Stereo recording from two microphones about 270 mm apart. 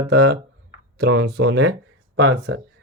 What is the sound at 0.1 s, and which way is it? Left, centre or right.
Speech, right.